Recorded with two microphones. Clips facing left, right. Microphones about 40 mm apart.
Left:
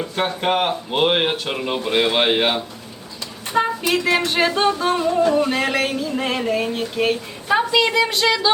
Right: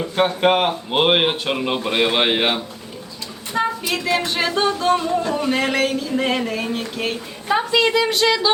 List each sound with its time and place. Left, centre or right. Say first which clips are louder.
0.4 s speech: right 1 dB; centre
1.3 s speech: right 2 dB; centre
3.5 s music: left 2 dB; centre
4.9 s music: left 4 dB; centre
6.1 s a woman's voice: right 3 dB; centre
6.5 s music: left 3 dB; centre
7.5 s a woman's voice: even; centre